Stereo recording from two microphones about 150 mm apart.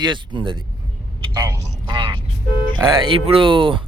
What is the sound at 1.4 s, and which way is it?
Speech, 20° right (ahead or behind).